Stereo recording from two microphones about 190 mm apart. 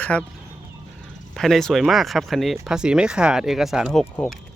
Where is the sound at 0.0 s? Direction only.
5° left (ahead or behind).